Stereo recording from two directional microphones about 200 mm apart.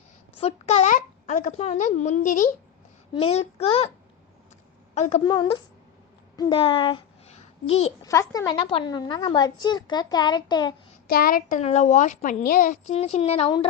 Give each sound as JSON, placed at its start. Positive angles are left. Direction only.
{"t": 0.3, "sound": "a woman's voice", "side_deg": 30}
{"t": 4.9, "sound": "a child's voice", "side_deg": 35}
{"t": 5.2, "sound": "a woman's voice", "side_deg": 20}
{"t": 6.3, "sound": "a sound", "side_deg": 20}
{"t": 8.0, "sound": "a woman's voice", "side_deg": 15}
{"t": 11.1, "sound": "a child's voice", "side_deg": 45}